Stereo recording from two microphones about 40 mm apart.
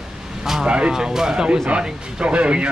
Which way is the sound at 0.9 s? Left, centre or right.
Centre.